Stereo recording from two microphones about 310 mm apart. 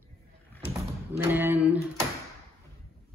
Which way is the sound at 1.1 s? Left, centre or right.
Centre.